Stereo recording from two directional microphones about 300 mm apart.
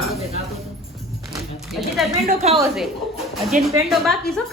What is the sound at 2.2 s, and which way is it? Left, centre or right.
Speech, right.